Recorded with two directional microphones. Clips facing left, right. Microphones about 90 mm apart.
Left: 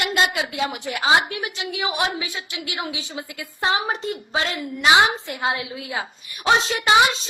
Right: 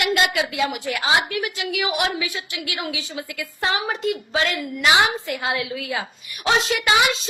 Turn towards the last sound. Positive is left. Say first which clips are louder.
# left 2 dB
turn(degrees=30)  # may be behind; listen again after turning